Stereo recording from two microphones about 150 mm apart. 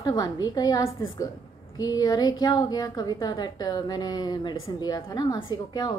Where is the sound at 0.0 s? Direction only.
25° left (ahead or behind).